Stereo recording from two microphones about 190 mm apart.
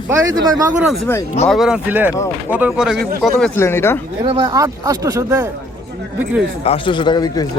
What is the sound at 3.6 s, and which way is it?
Speech, 10° left (ahead or behind).